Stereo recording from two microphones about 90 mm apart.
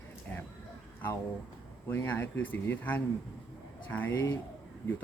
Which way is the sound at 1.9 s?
20° left (ahead or behind).